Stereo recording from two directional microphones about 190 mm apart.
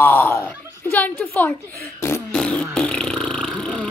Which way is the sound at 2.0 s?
10° left (ahead or behind).